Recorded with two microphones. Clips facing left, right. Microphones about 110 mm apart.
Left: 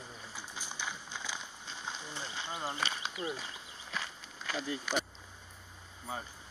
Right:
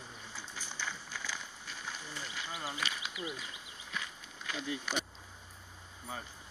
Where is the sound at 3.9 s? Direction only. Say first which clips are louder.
Left 2 dB; 35° left (ahead or behind).